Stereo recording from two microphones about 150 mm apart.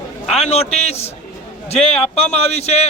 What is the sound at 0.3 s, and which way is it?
A man's voice, 45° left (ahead or behind).